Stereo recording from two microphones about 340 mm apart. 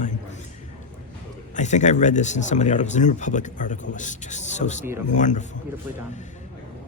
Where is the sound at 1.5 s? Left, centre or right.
Left.